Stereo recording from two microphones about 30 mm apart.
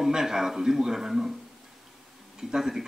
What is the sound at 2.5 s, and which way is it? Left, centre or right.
Speech, centre.